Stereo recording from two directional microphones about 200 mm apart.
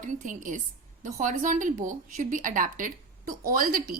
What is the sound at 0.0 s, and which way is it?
A woman's voice, 40° right (ahead or behind).